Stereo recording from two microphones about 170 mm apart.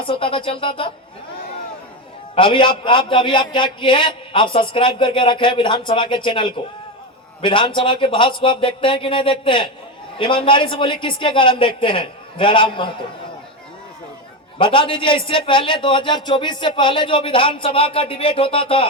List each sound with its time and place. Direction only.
0.0 s a man's voice: 30° left (ahead or behind)
2.3 s a man's voice: 30° left (ahead or behind)
14.6 s a man's voice: 30° left (ahead or behind)